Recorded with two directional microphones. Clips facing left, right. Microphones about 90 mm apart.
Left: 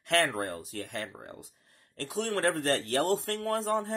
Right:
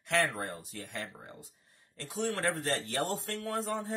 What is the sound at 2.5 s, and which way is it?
Speech, 70° left (ahead or behind).